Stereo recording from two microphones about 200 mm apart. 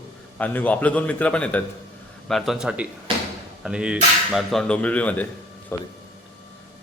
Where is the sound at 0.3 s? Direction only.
10° left (ahead or behind).